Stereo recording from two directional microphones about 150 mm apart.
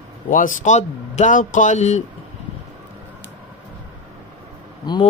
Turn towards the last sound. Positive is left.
turn(degrees=30)  # may be behind; listen again after turning